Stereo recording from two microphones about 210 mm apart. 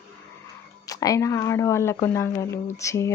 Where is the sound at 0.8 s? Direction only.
15° left (ahead or behind).